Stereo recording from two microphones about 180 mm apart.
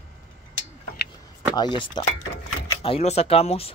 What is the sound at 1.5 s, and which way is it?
Speech, 25° left (ahead or behind).